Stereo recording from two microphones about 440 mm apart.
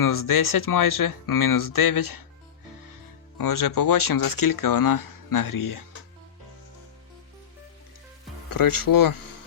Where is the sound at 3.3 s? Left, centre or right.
Left.